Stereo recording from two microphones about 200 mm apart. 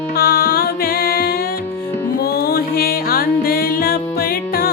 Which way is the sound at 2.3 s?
50° left (ahead or behind).